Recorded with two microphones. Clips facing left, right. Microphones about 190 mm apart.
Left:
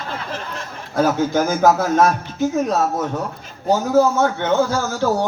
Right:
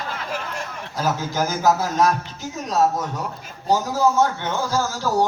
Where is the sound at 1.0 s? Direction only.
55° left (ahead or behind).